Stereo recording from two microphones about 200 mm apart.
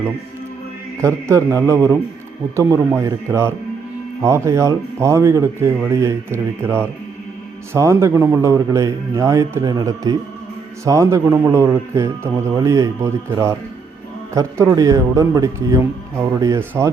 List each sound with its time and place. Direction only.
1.0 s a man's voice: 15° right (ahead or behind)